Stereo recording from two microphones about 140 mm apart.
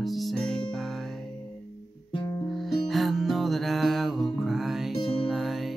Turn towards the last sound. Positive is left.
turn(degrees=0)  # may be behind; listen again after turning